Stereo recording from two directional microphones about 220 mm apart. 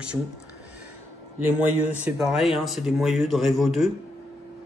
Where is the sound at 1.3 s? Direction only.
5° right (ahead or behind).